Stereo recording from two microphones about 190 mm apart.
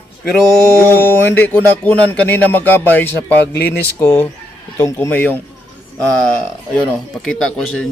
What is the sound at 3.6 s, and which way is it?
Speech, 55° left (ahead or behind).